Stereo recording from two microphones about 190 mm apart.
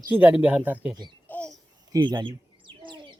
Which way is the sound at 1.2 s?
10° left (ahead or behind).